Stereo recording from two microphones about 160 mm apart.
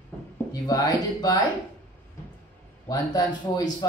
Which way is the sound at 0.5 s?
25° left (ahead or behind).